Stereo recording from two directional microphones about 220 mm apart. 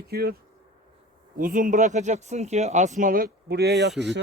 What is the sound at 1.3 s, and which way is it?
Speech, 40° right (ahead or behind).